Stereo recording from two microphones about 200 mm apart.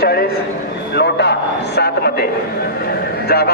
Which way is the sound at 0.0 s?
50° left (ahead or behind).